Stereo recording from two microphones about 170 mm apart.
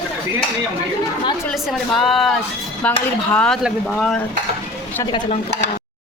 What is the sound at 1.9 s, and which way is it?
Speech, centre (ahead or behind).